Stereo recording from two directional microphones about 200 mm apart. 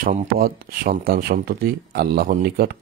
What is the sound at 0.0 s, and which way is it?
Speech, 40° right (ahead or behind).